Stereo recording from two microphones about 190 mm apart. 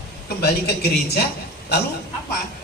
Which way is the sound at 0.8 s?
60° left (ahead or behind).